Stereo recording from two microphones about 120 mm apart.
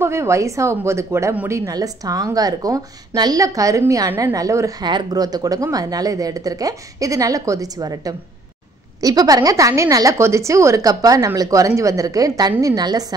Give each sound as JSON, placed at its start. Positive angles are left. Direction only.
{"t": 0.0, "sound": "a woman's voice", "side_deg": -20}